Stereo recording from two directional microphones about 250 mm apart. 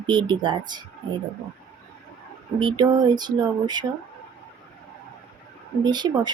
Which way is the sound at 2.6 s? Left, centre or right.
Centre.